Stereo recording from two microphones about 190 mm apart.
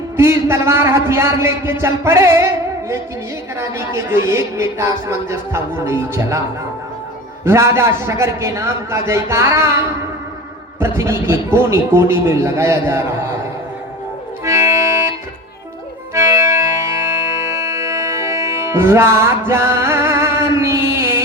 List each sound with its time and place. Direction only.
0.2 s speech: 15° right (ahead or behind)
3.6 s speech: 15° right (ahead or behind)
7.4 s speech: 15° right (ahead or behind)
14.4 s music: 15° right (ahead or behind)
16.1 s music: 15° right (ahead or behind)